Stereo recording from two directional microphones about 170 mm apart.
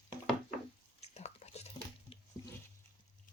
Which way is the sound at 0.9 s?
40° left (ahead or behind).